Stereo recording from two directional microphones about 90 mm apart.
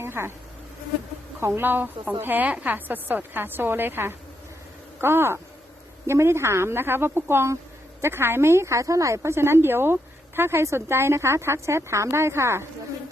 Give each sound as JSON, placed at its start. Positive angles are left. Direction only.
{"t": 0.0, "sound": "insect", "side_deg": -25}
{"t": 1.4, "sound": "speech", "side_deg": -25}